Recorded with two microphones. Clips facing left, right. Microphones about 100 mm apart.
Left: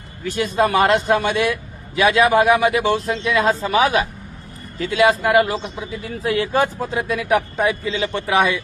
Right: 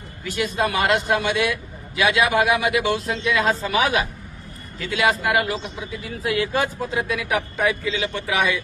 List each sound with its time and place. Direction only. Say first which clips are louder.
0.3 s speech: left 5 dB; 40° left (ahead or behind)